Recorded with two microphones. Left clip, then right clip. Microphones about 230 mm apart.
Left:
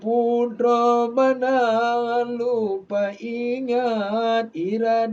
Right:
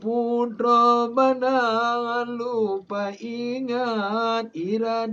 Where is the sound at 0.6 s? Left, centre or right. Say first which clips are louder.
Right 1 dB; centre.